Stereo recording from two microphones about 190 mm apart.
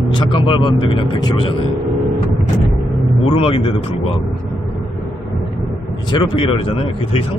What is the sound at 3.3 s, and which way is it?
Speech, 30° left (ahead or behind).